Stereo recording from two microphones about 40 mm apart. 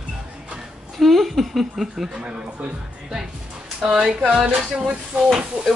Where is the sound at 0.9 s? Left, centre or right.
Centre.